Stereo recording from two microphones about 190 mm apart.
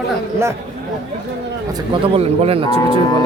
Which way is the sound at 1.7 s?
30° right (ahead or behind).